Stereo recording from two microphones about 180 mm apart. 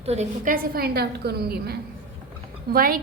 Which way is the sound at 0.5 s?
55° right (ahead or behind).